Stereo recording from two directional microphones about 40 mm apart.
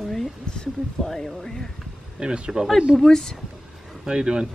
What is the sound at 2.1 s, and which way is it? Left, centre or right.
Speech, right.